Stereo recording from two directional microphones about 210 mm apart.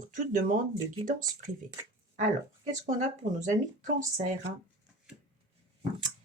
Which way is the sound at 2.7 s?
35° right (ahead or behind).